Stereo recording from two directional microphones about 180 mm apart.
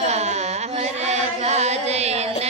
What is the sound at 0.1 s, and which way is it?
Carnatic music, 35° right (ahead or behind).